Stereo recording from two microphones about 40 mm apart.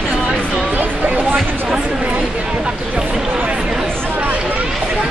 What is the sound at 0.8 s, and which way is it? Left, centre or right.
Music, right.